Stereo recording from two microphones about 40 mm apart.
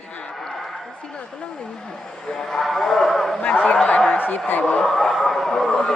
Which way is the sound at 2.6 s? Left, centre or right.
Centre.